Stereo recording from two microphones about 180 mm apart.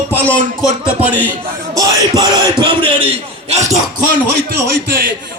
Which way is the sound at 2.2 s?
25° right (ahead or behind).